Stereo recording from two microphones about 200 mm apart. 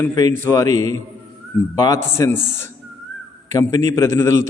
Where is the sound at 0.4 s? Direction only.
15° left (ahead or behind).